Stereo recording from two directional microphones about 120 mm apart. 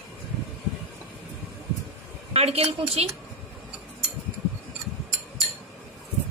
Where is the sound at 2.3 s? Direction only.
60° right (ahead or behind).